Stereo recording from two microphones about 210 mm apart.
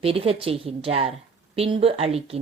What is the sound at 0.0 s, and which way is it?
A woman's voice, 25° right (ahead or behind).